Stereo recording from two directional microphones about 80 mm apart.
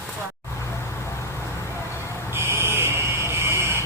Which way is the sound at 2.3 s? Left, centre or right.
Right.